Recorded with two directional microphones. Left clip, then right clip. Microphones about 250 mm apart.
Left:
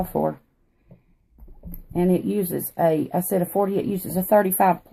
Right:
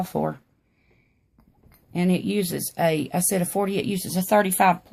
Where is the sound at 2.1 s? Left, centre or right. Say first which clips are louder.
Left 2 dB; right.